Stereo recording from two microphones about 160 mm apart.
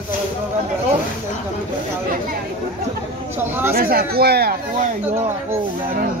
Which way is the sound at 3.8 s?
70° right (ahead or behind).